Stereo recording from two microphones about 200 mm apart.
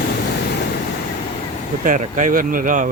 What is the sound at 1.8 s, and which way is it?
Speech, 40° right (ahead or behind).